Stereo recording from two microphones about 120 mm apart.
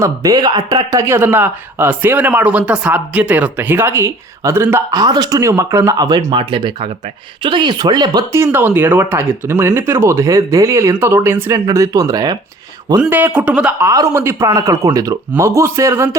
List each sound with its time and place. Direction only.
0.0 s speech: 30° right (ahead or behind)
8.3 s speech: 20° right (ahead or behind)
13.0 s speech: 15° right (ahead or behind)
13.8 s speech: 25° right (ahead or behind)